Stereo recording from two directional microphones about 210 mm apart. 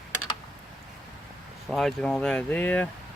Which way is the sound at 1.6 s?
Centre (ahead or behind).